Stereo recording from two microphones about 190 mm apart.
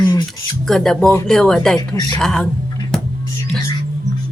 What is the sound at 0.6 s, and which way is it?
Speech, centre (ahead or behind).